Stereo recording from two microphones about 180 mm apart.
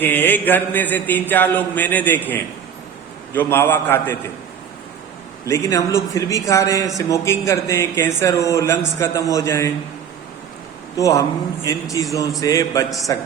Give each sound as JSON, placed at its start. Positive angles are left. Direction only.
{"t": 0.0, "sound": "a man's voice", "side_deg": 10}
{"t": 5.5, "sound": "a man's voice", "side_deg": 15}
{"t": 10.9, "sound": "a man's voice", "side_deg": 20}
{"t": 12.4, "sound": "a sound", "side_deg": 20}